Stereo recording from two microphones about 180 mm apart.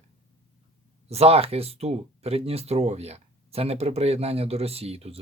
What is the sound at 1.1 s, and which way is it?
Speech, 35° right (ahead or behind).